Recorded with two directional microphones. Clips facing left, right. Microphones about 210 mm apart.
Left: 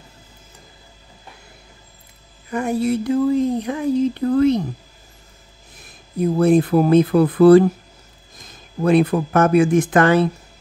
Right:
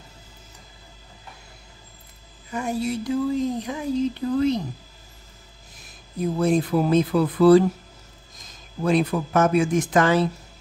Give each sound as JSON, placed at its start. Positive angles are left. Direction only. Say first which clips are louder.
{"t": 2.5, "sound": "speech", "louder": "left 6 dB", "side_deg": 55}
{"t": 6.3, "sound": "speech", "louder": "left 6 dB", "side_deg": 55}